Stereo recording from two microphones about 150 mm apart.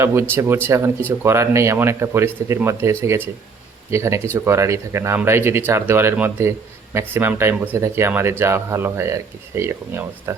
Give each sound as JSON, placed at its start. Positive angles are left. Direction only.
{"t": 0.0, "sound": "speech", "side_deg": -20}